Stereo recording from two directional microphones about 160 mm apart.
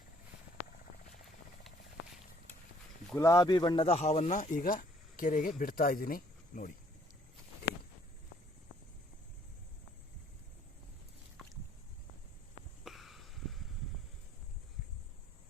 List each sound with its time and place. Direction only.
3.2 s speech: 20° left (ahead or behind)
3.8 s speech: 40° left (ahead or behind); by 6.7 s 65° left (ahead or behind)
12.8 s a sound: centre (ahead or behind)